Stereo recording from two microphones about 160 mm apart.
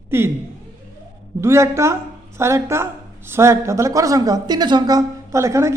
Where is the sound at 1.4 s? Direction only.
15° right (ahead or behind).